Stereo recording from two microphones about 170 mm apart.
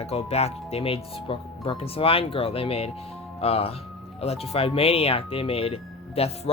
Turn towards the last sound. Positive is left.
turn(degrees=35)  # may be behind; listen again after turning